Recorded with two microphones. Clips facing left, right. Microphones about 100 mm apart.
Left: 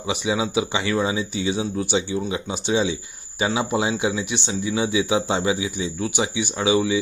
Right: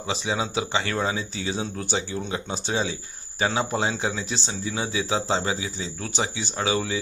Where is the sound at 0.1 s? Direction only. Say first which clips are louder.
Left 4 dB; 15° left (ahead or behind).